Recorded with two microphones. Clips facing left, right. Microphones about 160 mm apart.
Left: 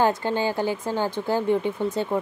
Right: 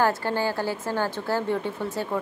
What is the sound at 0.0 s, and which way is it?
Speech, 20° left (ahead or behind).